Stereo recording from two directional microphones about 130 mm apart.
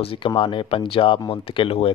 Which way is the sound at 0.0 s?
45° left (ahead or behind).